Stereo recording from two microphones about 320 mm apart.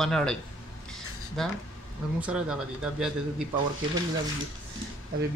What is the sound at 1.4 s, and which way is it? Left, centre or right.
Speech, centre.